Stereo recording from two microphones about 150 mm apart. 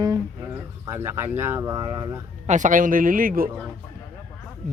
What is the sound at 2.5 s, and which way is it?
Speech, 60° right (ahead or behind).